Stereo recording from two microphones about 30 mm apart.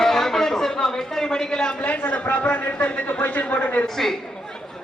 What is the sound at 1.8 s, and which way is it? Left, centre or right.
A man's voice, left.